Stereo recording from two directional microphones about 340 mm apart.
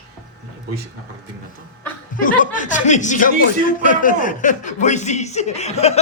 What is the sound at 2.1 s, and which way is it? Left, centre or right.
Speech, left.